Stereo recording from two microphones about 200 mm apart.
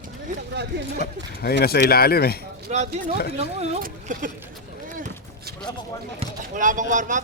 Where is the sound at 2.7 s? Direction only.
35° right (ahead or behind).